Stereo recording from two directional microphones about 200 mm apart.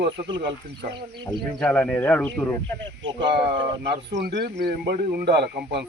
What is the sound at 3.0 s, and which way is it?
Speech, 65° right (ahead or behind).